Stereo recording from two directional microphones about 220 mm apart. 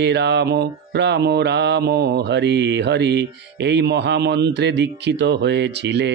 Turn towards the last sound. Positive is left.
turn(degrees=-50)  # may be behind; listen again after turning